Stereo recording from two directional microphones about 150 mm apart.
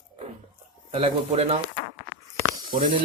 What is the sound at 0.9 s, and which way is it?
Speech, 35° right (ahead or behind).